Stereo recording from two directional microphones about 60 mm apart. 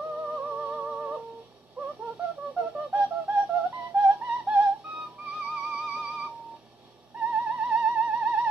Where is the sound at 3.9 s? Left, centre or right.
Right.